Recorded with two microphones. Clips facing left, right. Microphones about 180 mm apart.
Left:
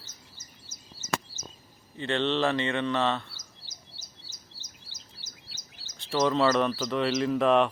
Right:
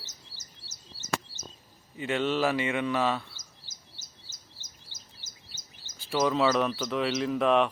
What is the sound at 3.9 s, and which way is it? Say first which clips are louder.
Chirp: left 2 dB; 50° right (ahead or behind).